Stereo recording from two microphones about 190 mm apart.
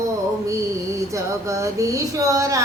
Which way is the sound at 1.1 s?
15° right (ahead or behind).